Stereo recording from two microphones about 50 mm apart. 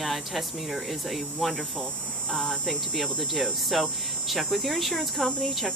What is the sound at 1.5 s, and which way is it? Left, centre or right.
Speech, centre.